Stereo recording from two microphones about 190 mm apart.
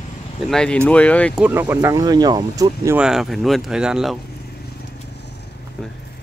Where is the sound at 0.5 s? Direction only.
5° left (ahead or behind).